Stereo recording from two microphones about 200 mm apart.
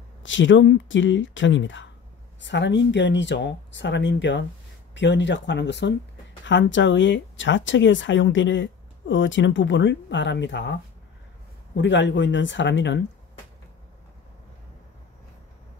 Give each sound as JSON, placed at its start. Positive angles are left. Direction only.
{"t": 0.2, "sound": "speech", "side_deg": 70}